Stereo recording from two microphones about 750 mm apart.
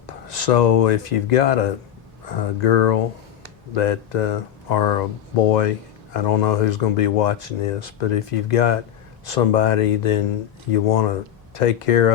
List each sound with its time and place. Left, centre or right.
0.1 s speech: left